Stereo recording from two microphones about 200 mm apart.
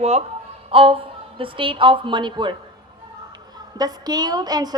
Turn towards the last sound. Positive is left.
turn(degrees=-20)  # may be behind; listen again after turning